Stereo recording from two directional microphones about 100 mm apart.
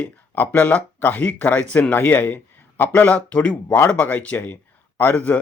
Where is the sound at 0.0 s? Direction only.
15° left (ahead or behind).